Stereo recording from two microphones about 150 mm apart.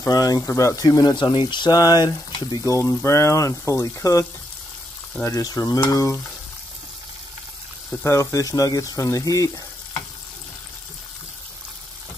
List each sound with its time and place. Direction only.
0.0 s speech: 25° left (ahead or behind)
8.0 s speech: 20° left (ahead or behind)